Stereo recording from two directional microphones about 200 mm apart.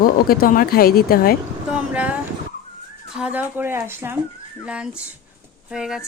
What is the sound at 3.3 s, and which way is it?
Speech, 10° right (ahead or behind).